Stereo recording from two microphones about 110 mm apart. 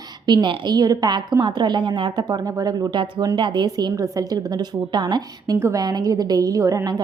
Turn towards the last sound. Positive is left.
turn(degrees=-35)  # may be behind; listen again after turning